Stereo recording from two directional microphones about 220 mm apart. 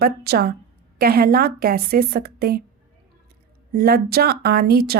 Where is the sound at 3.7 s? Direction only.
45° right (ahead or behind).